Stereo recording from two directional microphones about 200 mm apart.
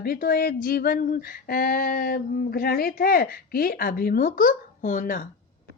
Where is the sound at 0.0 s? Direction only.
50° left (ahead or behind).